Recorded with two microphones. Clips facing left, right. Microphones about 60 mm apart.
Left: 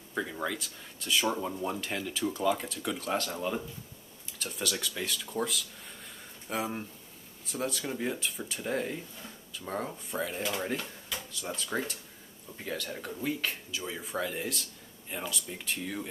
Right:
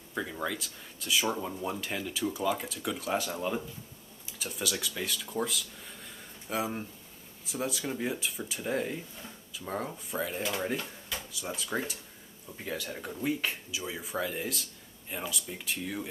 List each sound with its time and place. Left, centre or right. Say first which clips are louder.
0.1 s speech: left 1 dB; centre